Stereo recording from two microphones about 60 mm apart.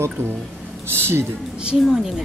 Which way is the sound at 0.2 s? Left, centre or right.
Right.